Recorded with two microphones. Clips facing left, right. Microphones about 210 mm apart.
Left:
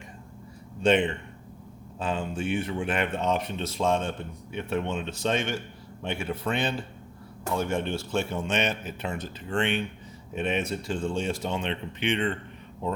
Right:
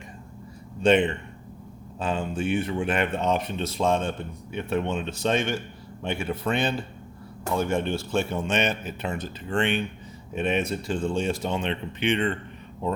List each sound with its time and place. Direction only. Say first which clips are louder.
2.0 s speech: right 2 dB; 45° right (ahead or behind)